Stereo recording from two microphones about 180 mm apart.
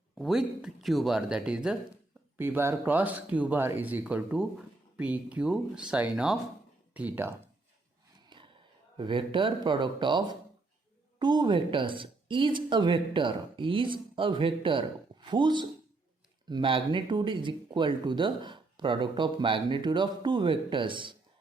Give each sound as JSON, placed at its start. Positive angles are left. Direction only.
{"t": 0.2, "sound": "speech", "side_deg": 0}
{"t": 8.3, "sound": "a sound", "side_deg": -25}
{"t": 9.0, "sound": "speech", "side_deg": -30}